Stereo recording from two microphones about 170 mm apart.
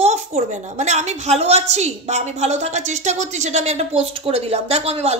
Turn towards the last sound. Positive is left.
turn(degrees=-40)  # may be behind; listen again after turning